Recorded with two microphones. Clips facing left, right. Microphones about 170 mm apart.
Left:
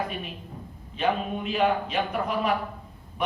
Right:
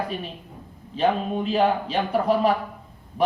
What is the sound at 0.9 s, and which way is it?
A man's voice, 35° right (ahead or behind).